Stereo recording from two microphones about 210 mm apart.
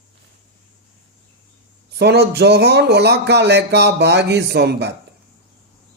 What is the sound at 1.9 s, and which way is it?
Speech, 50° right (ahead or behind).